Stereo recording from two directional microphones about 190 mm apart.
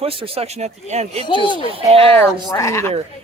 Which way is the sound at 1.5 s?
30° right (ahead or behind).